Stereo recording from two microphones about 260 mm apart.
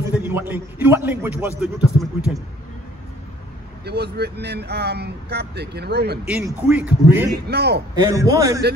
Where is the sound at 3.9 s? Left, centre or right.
Right.